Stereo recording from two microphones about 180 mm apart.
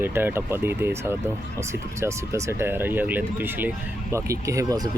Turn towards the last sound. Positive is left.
turn(degrees=-20)  # may be behind; listen again after turning